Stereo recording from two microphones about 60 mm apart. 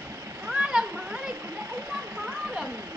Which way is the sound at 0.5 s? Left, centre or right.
Centre.